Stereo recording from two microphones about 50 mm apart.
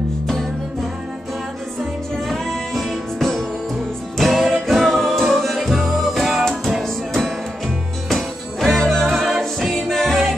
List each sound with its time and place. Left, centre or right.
2.2 s music: centre
8.1 s music: centre